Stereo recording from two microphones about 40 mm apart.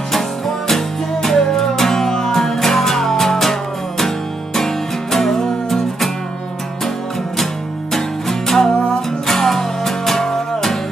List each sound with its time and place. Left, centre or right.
0.7 s music: centre
5.1 s music: centre
7.9 s music: centre